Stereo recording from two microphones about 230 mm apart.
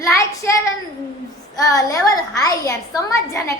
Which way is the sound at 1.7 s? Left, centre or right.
Centre.